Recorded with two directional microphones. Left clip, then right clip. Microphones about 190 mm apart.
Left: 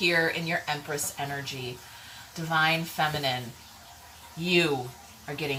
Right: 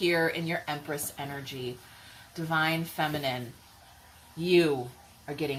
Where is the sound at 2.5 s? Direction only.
20° right (ahead or behind).